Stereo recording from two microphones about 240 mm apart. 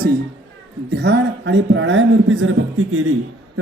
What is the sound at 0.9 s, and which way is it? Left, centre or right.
A man's voice, right.